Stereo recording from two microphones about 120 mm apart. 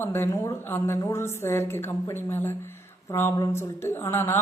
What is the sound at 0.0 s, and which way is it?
A woman's voice, 20° left (ahead or behind).